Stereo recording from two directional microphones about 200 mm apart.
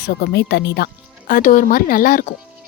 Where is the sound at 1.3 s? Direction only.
40° left (ahead or behind).